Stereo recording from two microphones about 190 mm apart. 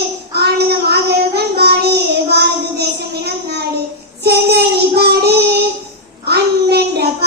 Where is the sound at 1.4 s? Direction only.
55° right (ahead or behind).